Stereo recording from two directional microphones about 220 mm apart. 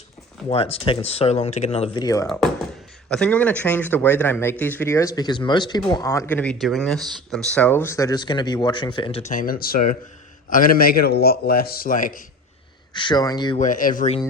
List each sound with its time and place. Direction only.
0.5 s speech: 25° left (ahead or behind)
2.2 s a man's voice: centre (ahead or behind); by 12.2 s 40° left (ahead or behind)
12.9 s speech: 20° left (ahead or behind)
13.6 s a man's voice: 35° left (ahead or behind)